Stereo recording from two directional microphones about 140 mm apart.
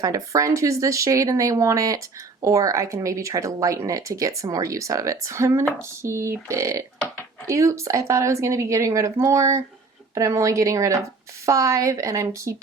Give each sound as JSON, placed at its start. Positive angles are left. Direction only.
{"t": 0.0, "sound": "speech", "side_deg": -25}